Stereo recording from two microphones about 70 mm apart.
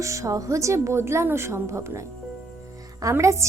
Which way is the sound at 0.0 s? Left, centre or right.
Right.